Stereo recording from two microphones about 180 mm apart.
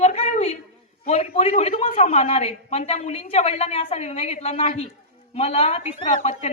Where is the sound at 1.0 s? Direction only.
35° left (ahead or behind).